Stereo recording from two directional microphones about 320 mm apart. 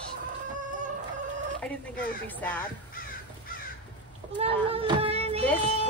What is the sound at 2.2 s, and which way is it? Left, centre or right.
Speech, centre.